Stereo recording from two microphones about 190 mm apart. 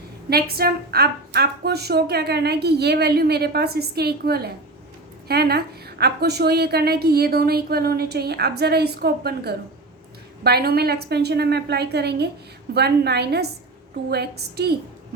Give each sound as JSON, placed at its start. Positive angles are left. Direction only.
{"t": 0.3, "sound": "speech", "side_deg": -55}